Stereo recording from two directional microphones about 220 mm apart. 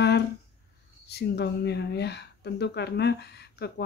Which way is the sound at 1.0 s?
50° left (ahead or behind).